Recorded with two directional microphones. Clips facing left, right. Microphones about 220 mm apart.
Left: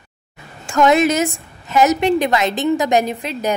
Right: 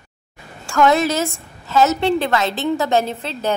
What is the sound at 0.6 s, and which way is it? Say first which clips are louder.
A woman's voice: left 2 dB; 20° left (ahead or behind).